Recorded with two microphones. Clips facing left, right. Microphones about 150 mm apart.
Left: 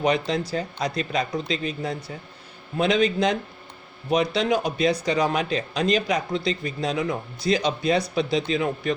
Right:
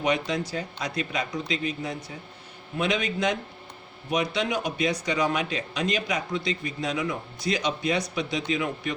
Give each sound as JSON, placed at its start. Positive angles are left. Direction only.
{"t": 0.0, "sound": "speech", "side_deg": 35}